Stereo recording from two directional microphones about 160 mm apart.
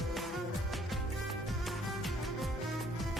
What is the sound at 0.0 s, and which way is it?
Music, centre (ahead or behind).